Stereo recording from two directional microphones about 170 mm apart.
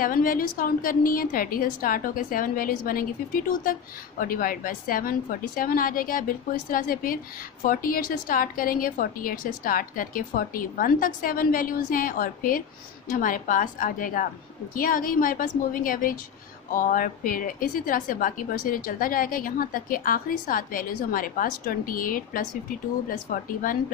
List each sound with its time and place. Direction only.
0.0 s a woman's voice: 55° left (ahead or behind)